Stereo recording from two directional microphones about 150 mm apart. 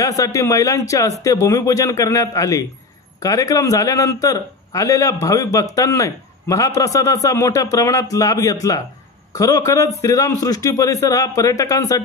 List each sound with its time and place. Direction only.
0.0 s a man's voice: 20° left (ahead or behind)